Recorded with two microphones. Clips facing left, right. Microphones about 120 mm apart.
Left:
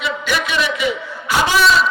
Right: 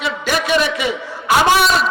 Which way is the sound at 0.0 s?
45° right (ahead or behind).